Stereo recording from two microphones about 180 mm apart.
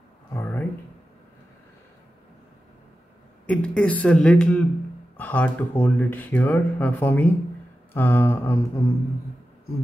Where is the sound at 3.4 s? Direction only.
5° left (ahead or behind).